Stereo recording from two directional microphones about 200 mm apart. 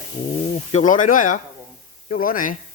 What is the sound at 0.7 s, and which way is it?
Speech, 40° left (ahead or behind).